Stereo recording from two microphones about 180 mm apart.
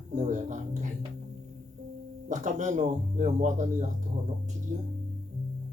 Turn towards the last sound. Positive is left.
turn(degrees=-45)  # may be behind; listen again after turning